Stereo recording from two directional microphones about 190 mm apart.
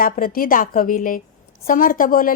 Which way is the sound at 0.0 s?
50° left (ahead or behind).